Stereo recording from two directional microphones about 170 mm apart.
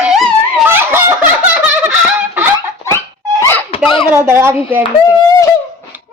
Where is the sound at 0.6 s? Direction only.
15° right (ahead or behind).